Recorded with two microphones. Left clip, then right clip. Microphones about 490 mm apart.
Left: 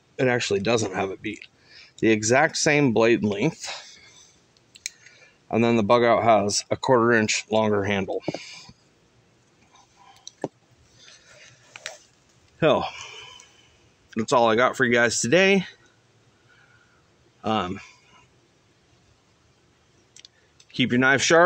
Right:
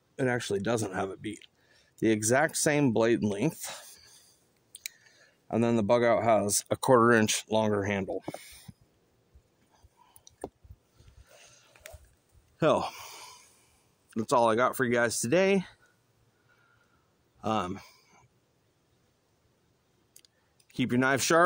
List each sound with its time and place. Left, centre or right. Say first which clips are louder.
0.1 s speech: left 7 dB; right
5.5 s speech: left 6 dB; right
12.5 s a sound: left 5 dB; right
14.1 s speech: left 5 dB; right
17.4 s speech: left 5 dB; right
20.7 s speech: left 7 dB; right